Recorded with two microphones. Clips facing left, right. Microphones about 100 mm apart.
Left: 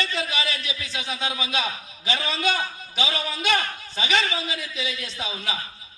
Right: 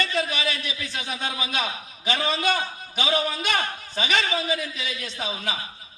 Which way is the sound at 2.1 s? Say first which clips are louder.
Right 2 dB; 50° right (ahead or behind).